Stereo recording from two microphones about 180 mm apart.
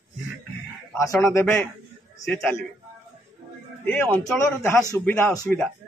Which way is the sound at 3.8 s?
10° left (ahead or behind).